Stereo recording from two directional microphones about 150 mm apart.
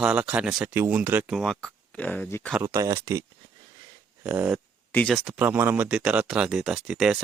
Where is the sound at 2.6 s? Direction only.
25° right (ahead or behind).